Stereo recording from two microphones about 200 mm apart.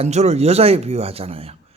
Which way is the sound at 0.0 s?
35° right (ahead or behind).